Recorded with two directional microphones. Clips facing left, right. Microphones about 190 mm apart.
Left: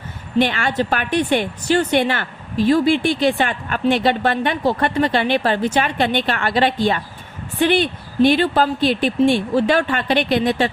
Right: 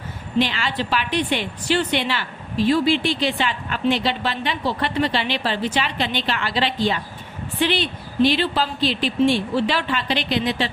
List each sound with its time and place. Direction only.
0.3 s a woman's voice: 55° left (ahead or behind)